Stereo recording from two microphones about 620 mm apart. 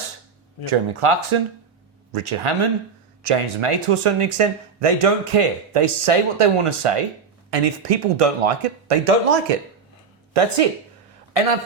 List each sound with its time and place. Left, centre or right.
0.6 s speech: right